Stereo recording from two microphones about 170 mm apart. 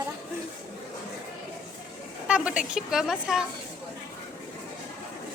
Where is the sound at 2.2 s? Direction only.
5° right (ahead or behind).